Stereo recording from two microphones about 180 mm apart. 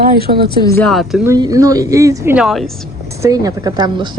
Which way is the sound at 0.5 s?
20° left (ahead or behind).